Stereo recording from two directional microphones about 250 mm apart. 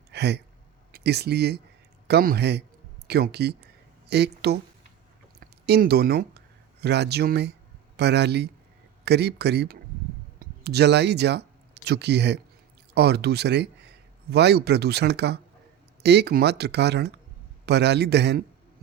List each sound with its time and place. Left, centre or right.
0.1 s speech: right
5.6 s speech: right